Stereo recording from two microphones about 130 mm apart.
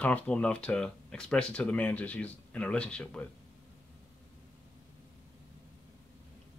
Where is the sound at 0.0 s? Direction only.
10° left (ahead or behind).